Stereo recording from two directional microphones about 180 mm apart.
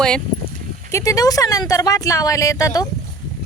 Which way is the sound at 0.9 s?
20° left (ahead or behind).